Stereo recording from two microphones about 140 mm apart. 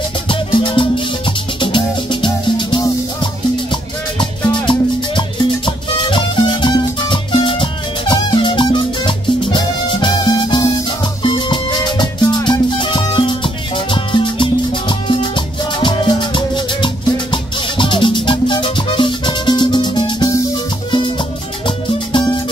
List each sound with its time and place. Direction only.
0.3 s music: 35° left (ahead or behind)
21.6 s music: 35° left (ahead or behind)